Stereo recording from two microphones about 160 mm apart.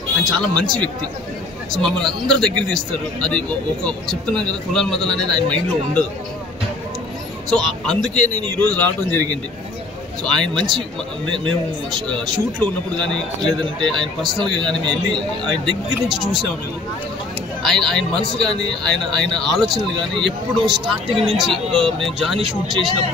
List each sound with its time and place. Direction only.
0.2 s a man's voice: 5° left (ahead or behind)
7.4 s a man's voice: 5° left (ahead or behind)
10.2 s a man's voice: 5° left (ahead or behind)
12.1 s a man's voice: 5° left (ahead or behind)
17.6 s a man's voice: 5° left (ahead or behind)
22.4 s speech: 30° right (ahead or behind)